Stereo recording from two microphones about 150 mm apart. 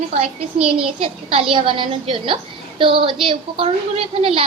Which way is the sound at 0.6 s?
5° right (ahead or behind).